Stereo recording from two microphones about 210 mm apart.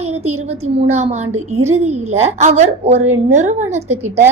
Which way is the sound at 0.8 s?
30° right (ahead or behind).